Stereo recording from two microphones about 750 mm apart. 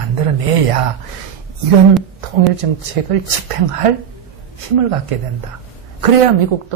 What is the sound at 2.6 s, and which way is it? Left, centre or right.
Speech, right.